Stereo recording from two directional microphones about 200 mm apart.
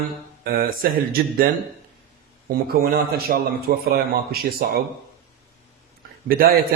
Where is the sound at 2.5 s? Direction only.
50° right (ahead or behind).